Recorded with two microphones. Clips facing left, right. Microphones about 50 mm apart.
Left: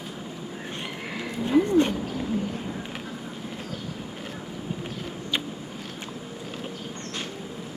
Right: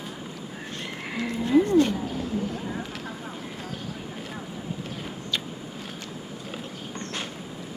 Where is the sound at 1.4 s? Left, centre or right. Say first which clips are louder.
Right 1 dB; left.